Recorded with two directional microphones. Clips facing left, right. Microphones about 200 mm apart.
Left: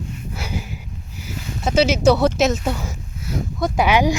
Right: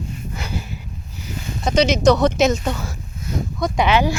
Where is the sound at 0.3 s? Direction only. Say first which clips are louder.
Left 1 dB; 10° left (ahead or behind).